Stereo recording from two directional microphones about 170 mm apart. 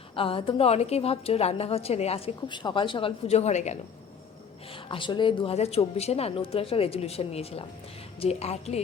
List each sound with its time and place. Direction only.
0.2 s a woman's voice: 30° left (ahead or behind)
4.9 s a woman's voice: 30° left (ahead or behind)